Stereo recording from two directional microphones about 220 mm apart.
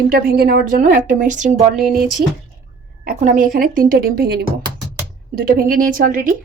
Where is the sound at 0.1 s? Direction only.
45° right (ahead or behind).